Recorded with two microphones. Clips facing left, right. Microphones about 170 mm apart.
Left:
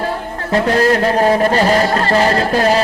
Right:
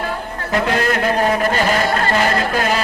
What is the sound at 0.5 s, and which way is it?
A man's voice, 35° left (ahead or behind).